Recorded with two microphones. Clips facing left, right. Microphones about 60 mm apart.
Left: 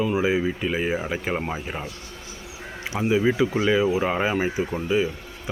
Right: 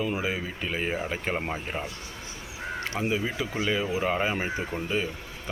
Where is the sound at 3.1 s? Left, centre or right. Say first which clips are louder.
Left 8 dB; centre.